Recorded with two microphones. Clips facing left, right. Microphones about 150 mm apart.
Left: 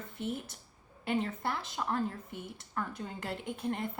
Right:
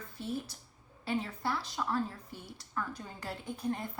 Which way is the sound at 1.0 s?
55° left (ahead or behind).